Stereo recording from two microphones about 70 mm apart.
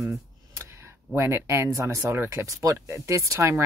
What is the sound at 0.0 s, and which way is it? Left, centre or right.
Speech, right.